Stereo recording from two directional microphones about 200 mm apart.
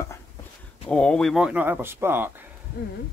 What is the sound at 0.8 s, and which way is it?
Speech, 5° left (ahead or behind).